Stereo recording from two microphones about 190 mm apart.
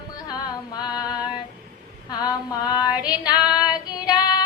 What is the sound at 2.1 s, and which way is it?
Female singing, 20° left (ahead or behind).